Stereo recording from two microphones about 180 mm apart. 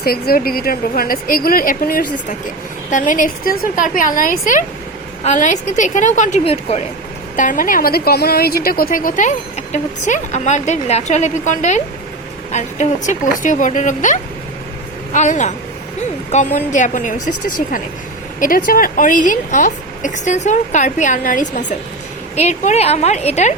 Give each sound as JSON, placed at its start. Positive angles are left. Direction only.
{"t": 0.0, "sound": "a woman's voice", "side_deg": 55}
{"t": 7.3, "sound": "a woman's voice", "side_deg": 45}